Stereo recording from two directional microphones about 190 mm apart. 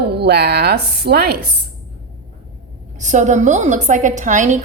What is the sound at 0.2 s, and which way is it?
Speech, 60° right (ahead or behind).